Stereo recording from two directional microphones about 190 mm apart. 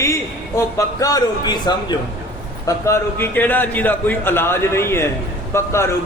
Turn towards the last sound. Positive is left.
turn(degrees=15)  # may be behind; listen again after turning